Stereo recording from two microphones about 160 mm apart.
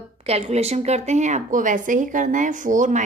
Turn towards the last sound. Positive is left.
turn(degrees=-50)  # may be behind; listen again after turning